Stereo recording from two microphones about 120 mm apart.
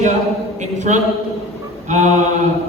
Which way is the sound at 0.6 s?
90° right.